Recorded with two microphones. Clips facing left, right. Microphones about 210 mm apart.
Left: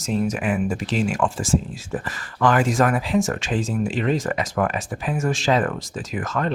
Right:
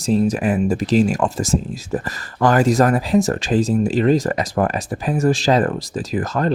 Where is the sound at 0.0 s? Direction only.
35° right (ahead or behind).